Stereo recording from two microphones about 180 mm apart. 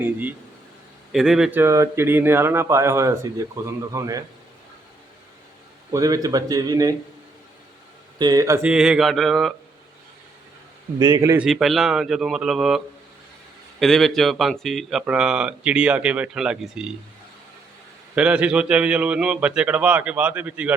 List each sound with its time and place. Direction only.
0.0 s speech: 10° right (ahead or behind)
5.9 s speech: 20° right (ahead or behind)
8.2 s speech: 20° right (ahead or behind)
8.6 s speech: 5° right (ahead or behind)
11.0 s speech: 20° right (ahead or behind)
11.4 s speech: centre (ahead or behind)
18.1 s speech: 5° right (ahead or behind)